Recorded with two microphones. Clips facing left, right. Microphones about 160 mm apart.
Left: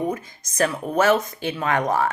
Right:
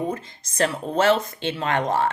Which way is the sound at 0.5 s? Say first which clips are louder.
Left 1 dB; 30° right (ahead or behind).